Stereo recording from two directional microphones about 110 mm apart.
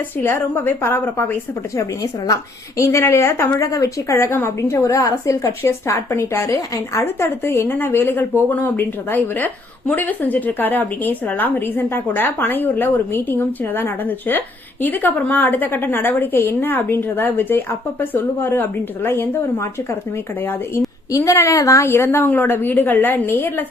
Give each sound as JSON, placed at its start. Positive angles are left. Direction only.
{"t": 0.2, "sound": "a woman's voice", "side_deg": 20}